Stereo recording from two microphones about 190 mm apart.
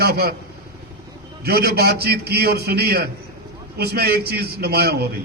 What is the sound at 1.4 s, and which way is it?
A man's voice, 55° right (ahead or behind).